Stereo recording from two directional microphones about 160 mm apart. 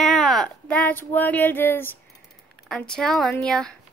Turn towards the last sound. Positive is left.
turn(degrees=5)  # may be behind; listen again after turning